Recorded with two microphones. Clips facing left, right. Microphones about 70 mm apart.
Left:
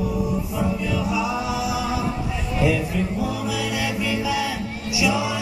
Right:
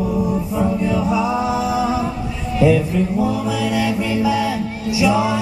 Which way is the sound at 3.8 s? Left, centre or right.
Right.